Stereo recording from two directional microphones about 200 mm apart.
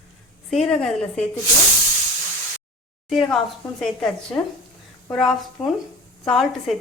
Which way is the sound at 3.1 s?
Centre (ahead or behind).